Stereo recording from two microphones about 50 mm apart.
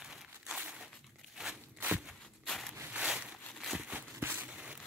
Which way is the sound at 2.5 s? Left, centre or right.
Centre.